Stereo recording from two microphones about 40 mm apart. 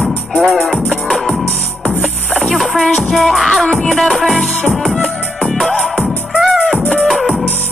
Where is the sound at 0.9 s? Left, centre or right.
Centre.